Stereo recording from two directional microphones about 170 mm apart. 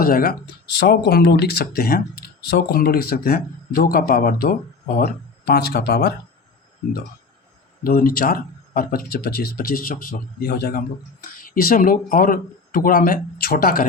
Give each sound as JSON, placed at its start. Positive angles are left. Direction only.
{"t": 0.0, "sound": "speech", "side_deg": 55}
{"t": 0.8, "sound": "speech", "side_deg": 80}
{"t": 7.9, "sound": "speech", "side_deg": 60}